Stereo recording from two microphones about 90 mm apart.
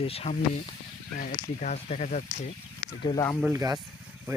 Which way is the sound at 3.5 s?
40° right (ahead or behind).